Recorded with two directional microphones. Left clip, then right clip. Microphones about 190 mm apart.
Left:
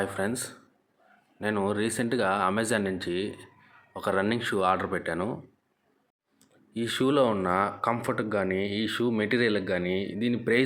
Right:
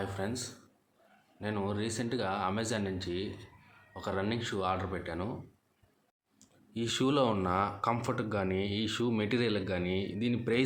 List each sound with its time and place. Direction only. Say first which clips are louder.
0.0 s speech: left 7 dB; 25° left (ahead or behind)
6.7 s speech: left 5 dB; 5° left (ahead or behind)